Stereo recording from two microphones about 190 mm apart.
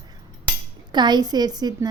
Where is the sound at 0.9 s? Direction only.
20° right (ahead or behind).